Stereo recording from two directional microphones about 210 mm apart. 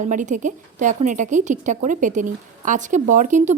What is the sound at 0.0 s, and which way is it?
A woman's voice, 35° right (ahead or behind).